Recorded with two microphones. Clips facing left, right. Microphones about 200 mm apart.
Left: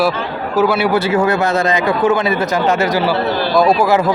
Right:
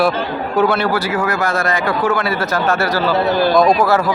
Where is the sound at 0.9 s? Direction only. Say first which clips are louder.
Left 4 dB; 25° left (ahead or behind).